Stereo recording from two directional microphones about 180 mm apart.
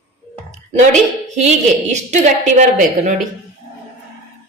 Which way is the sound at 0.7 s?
40° right (ahead or behind).